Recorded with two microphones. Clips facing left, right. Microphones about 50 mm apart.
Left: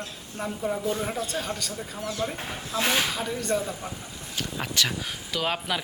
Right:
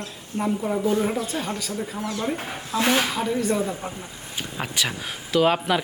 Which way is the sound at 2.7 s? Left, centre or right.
Centre.